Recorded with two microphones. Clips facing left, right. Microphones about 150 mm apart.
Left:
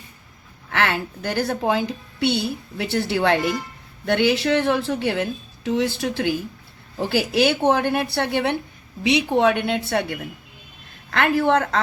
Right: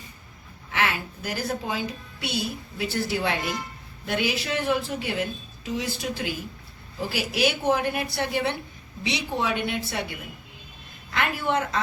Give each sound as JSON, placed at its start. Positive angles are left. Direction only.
{"t": 0.7, "sound": "a woman's voice", "side_deg": 70}
{"t": 7.3, "sound": "a woman's voice", "side_deg": 70}